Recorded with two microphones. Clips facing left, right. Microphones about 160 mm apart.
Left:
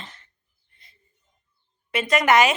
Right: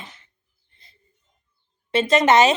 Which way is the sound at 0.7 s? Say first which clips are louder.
Right 1 dB; 30° right (ahead or behind).